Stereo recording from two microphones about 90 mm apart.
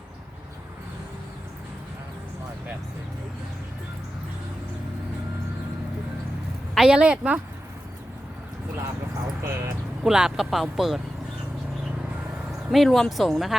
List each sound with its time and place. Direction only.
6.7 s a woman's voice: 10° right (ahead or behind)
9.4 s a sound: 30° right (ahead or behind)
10.0 s speech: 5° right (ahead or behind)
12.5 s speech: centre (ahead or behind)